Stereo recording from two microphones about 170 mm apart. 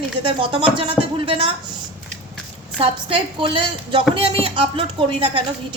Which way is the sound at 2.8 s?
30° right (ahead or behind).